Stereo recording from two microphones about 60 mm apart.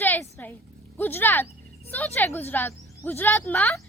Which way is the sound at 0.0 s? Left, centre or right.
Left.